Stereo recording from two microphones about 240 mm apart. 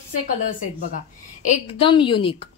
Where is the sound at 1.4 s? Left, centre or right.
Left.